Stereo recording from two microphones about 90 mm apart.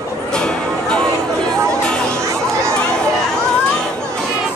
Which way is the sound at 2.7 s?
10° left (ahead or behind).